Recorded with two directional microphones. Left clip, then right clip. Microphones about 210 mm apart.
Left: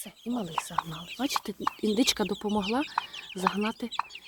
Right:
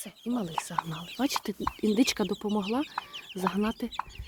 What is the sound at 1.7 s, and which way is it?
Speech, 5° right (ahead or behind).